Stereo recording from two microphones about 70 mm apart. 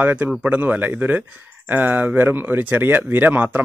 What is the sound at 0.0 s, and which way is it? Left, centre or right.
A man's voice, right.